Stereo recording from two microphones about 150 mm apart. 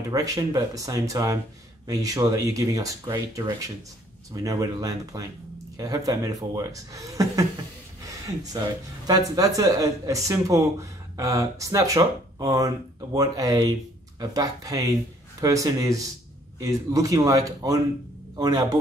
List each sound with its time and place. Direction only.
0.1 s speech: 25° right (ahead or behind)